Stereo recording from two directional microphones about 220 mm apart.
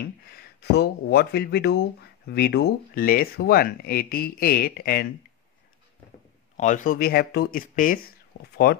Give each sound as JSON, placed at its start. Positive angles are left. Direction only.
{"t": 0.0, "sound": "speech", "side_deg": 45}
{"t": 6.5, "sound": "speech", "side_deg": 35}
{"t": 8.3, "sound": "speech", "side_deg": 55}